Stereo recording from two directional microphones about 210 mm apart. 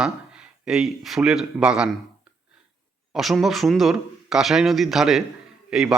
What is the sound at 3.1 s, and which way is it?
Speech, centre (ahead or behind).